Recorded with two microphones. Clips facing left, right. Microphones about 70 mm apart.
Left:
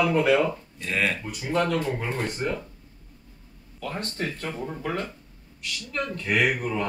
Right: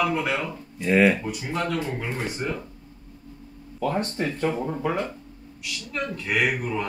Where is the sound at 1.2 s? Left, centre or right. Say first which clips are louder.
Left 2 dB; centre.